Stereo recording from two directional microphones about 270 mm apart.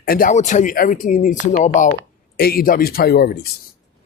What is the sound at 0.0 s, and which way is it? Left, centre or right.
Speech, left.